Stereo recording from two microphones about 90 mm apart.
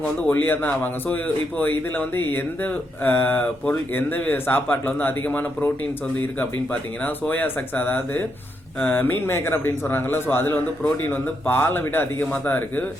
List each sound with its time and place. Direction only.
0.0 s speech: 20° left (ahead or behind)
7.0 s speech: 20° left (ahead or behind)